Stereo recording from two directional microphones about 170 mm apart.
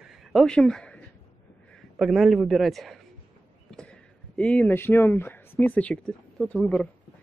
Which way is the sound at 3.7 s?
5° left (ahead or behind).